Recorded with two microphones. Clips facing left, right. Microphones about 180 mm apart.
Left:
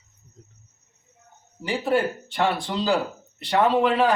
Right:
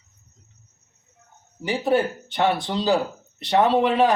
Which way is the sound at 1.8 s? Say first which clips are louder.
Right 2 dB; 20° right (ahead or behind).